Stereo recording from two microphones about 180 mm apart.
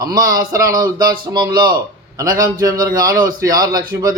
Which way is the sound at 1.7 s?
20° right (ahead or behind).